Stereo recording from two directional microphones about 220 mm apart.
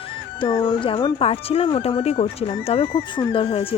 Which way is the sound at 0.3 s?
25° left (ahead or behind).